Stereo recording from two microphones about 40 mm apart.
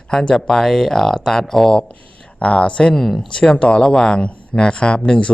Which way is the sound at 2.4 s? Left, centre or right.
Left.